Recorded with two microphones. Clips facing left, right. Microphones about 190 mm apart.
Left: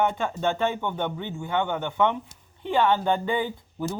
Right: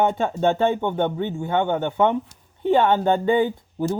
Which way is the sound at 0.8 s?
50° right (ahead or behind).